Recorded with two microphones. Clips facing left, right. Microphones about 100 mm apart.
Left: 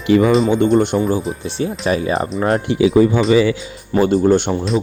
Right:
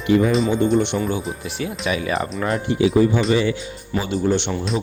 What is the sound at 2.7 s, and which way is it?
Speech, 80° left.